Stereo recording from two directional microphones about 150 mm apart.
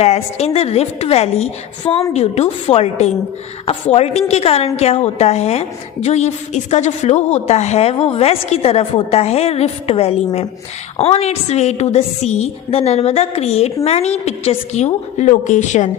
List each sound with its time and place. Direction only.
0.0 s a woman's voice: 45° left (ahead or behind)